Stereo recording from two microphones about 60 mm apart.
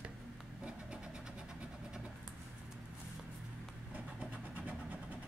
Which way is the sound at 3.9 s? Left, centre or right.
Right.